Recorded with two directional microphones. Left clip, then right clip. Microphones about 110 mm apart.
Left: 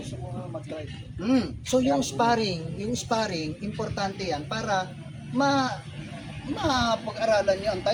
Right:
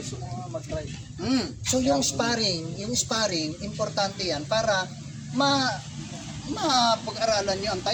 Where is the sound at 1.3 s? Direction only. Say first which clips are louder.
Left 2 dB; 15° left (ahead or behind).